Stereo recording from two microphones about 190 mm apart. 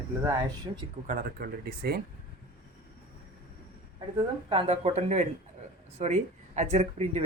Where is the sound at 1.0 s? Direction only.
45° right (ahead or behind).